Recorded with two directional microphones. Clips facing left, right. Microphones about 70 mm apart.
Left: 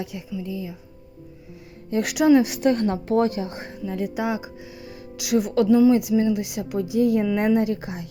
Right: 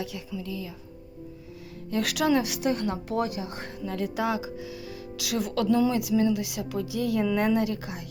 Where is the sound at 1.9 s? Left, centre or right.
Left.